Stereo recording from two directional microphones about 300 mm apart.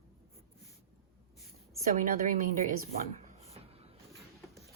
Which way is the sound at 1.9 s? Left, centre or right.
Right.